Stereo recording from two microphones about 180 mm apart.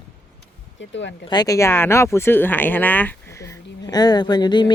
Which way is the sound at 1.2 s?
25° left (ahead or behind).